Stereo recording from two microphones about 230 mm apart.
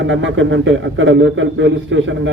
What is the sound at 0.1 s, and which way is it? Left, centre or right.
A man's voice, right.